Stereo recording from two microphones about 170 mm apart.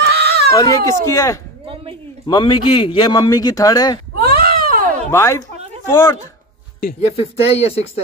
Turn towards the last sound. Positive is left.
turn(degrees=35)  # may be behind; listen again after turning